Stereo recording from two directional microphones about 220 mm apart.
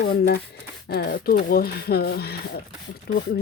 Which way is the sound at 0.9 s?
45° left (ahead or behind).